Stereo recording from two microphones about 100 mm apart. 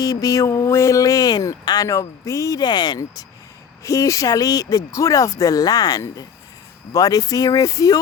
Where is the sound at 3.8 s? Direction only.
30° left (ahead or behind).